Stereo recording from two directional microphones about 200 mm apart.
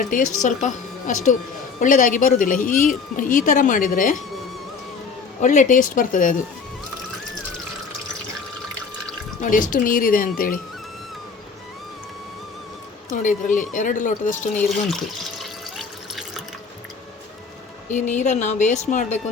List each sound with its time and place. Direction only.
0.0 s speech: 40° left (ahead or behind)
5.4 s speech: 40° left (ahead or behind)
9.4 s speech: 40° left (ahead or behind)
13.2 s speech: 40° left (ahead or behind)
15.4 s water: centre (ahead or behind)
17.9 s speech: 35° left (ahead or behind)